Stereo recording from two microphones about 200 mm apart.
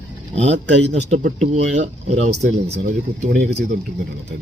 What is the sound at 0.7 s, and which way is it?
Speech, 60° right (ahead or behind).